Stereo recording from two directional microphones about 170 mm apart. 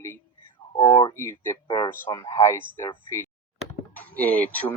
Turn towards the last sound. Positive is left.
turn(degrees=10)  # may be behind; listen again after turning